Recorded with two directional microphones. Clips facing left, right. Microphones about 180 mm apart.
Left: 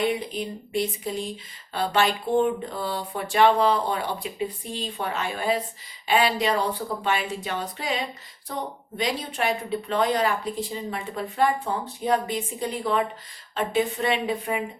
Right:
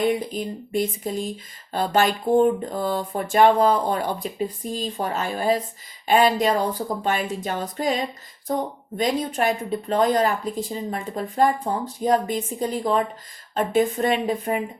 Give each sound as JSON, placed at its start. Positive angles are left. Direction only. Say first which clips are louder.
{"t": 0.0, "sound": "a woman's voice", "louder": "right 3 dB", "side_deg": -45}